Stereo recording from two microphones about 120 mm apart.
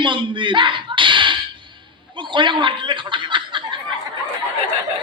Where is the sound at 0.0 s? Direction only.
45° right (ahead or behind).